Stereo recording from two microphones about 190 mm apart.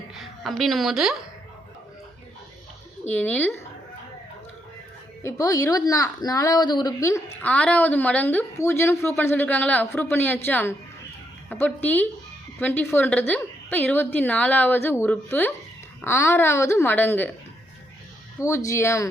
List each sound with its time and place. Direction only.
0.1 s a woman's voice: centre (ahead or behind)
3.1 s speech: 10° left (ahead or behind)
5.2 s speech: 15° left (ahead or behind)
18.3 s speech: 15° left (ahead or behind)